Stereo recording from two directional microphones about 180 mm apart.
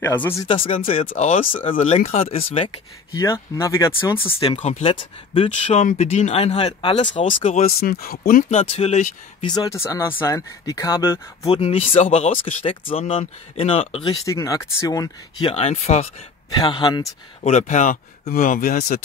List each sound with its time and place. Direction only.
0.0 s speech: 10° left (ahead or behind)
0.5 s speech: 30° left (ahead or behind)
3.1 s speech: 20° left (ahead or behind)
4.3 s speech: 30° left (ahead or behind)
7.8 s speech: 55° left (ahead or behind); by 9.5 s 40° left (ahead or behind)
9.5 s speech: 20° left (ahead or behind)
11.4 s speech: 30° left (ahead or behind)
14.2 s speech: 20° left (ahead or behind); by 16.1 s 40° left (ahead or behind)
16.4 s speech: 25° left (ahead or behind)
17.4 s speech: 40° left (ahead or behind)